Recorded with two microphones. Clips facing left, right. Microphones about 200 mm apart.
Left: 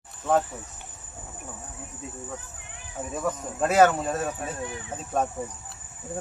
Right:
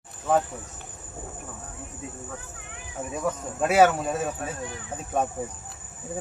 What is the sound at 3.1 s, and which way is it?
Speech, 5° right (ahead or behind).